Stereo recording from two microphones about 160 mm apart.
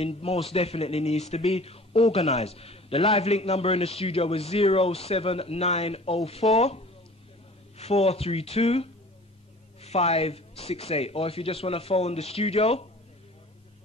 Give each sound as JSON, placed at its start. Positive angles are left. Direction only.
{"t": 0.0, "sound": "a man's voice", "side_deg": 40}